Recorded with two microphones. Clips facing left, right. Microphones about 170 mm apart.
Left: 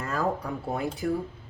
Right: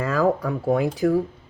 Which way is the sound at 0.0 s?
90° right.